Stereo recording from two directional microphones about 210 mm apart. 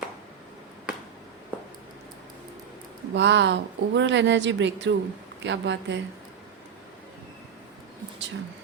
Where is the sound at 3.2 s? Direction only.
60° right (ahead or behind).